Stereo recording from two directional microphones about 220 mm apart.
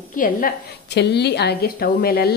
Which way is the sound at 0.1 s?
40° left (ahead or behind).